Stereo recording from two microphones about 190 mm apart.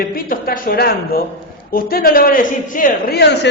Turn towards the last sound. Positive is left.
turn(degrees=60)  # may be behind; listen again after turning